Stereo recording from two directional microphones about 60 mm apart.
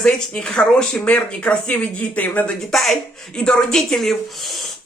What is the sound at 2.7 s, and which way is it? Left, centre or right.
Speech, centre.